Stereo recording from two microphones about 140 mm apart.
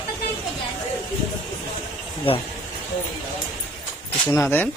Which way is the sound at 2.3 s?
40° left (ahead or behind).